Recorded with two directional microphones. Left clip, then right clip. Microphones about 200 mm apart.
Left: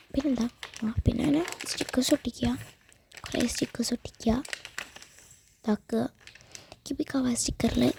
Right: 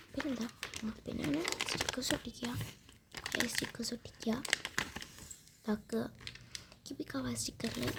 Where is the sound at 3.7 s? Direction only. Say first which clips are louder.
Left 10 dB; 40° left (ahead or behind).